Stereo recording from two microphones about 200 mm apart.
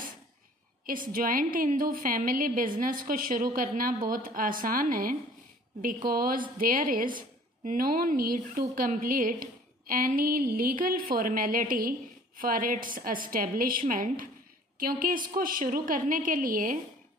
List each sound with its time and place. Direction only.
0.8 s a woman's voice: 45° right (ahead or behind)